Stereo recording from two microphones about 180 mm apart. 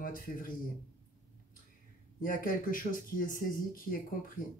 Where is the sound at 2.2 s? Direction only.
50° left (ahead or behind).